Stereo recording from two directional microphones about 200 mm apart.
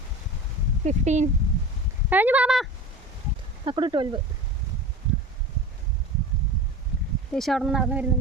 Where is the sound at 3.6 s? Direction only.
25° right (ahead or behind).